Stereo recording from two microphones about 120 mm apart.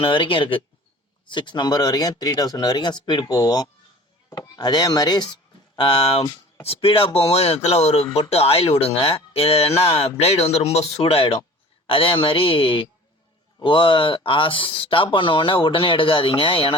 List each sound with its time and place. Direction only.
0.0 s speech: 45° left (ahead or behind)